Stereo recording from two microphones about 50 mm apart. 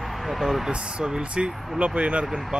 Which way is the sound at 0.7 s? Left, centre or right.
Right.